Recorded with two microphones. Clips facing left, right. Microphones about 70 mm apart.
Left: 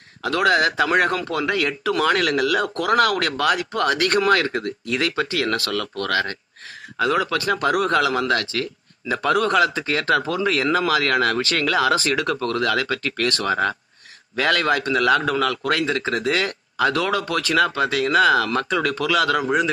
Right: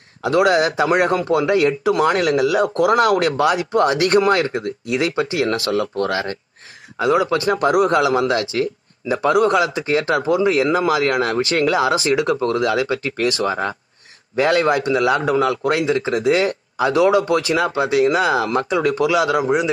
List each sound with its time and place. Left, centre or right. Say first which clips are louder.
0.2 s a man's voice: right 3 dB; right